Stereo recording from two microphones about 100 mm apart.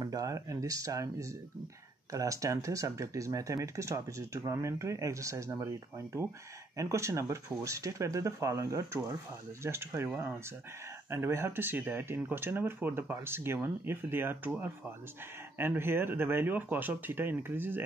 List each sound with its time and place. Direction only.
0.0 s speech: 35° right (ahead or behind)
2.1 s speech: 35° right (ahead or behind)
15.5 s speech: 25° right (ahead or behind)